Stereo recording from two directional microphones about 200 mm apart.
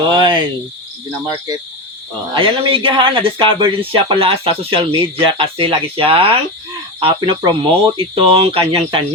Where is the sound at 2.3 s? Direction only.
25° right (ahead or behind).